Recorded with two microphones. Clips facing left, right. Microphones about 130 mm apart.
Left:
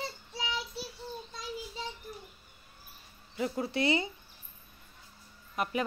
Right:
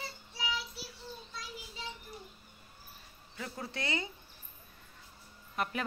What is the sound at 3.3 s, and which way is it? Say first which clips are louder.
Speech: left 9 dB; 20° left (ahead or behind).